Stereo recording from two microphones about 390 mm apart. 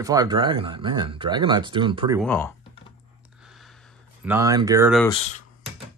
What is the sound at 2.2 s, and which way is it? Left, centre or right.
Typing, centre.